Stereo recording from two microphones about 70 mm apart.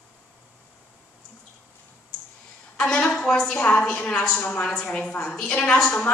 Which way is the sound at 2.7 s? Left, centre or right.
Centre.